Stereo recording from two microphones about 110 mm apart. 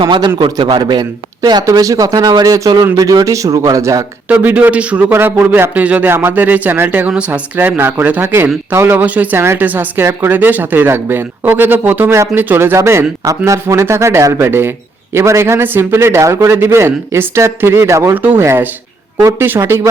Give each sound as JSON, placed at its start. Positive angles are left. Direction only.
{"t": 0.0, "sound": "a man's voice", "side_deg": -45}
{"t": 4.3, "sound": "speech", "side_deg": -15}